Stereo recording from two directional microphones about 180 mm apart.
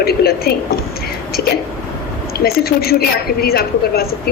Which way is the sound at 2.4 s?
60° left (ahead or behind).